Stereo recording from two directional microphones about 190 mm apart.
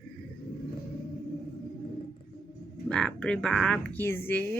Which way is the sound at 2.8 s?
5° left (ahead or behind).